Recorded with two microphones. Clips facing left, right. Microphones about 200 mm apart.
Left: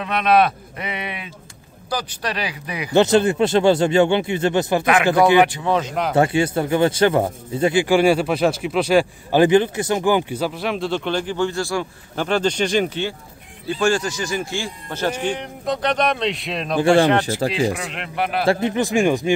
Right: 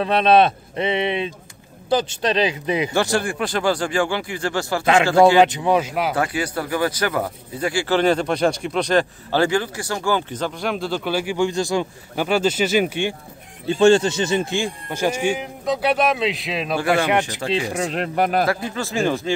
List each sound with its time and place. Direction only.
0.0 s speech: 30° right (ahead or behind)
2.9 s speech: 20° left (ahead or behind)
5.4 s speech: 20° right (ahead or behind)
6.1 s speech: 25° left (ahead or behind); by 12.3 s 20° right (ahead or behind)
12.3 s speech: 5° right (ahead or behind)
13.7 s speech: 25° right (ahead or behind); by 16.7 s centre (ahead or behind)
16.7 s speech: 30° left (ahead or behind)
17.7 s speech: 40° right (ahead or behind)
18.5 s speech: 20° left (ahead or behind)